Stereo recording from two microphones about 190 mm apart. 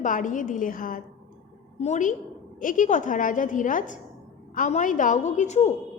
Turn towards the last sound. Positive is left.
turn(degrees=35)  # may be behind; listen again after turning